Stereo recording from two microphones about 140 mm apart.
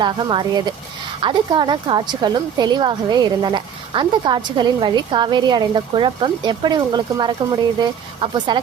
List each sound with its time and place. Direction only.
0.0 s a woman's voice: 35° right (ahead or behind)